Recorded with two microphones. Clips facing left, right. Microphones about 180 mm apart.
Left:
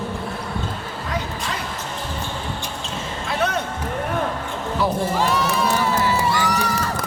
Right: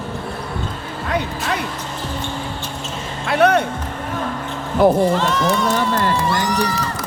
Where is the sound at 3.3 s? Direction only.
65° right (ahead or behind).